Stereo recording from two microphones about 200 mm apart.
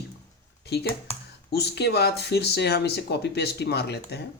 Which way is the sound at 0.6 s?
55° left (ahead or behind).